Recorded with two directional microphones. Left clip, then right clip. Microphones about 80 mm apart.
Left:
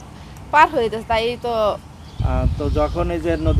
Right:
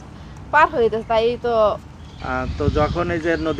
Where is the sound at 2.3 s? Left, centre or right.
Centre.